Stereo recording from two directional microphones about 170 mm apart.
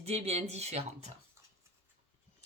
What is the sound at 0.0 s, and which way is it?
Speech, 40° right (ahead or behind).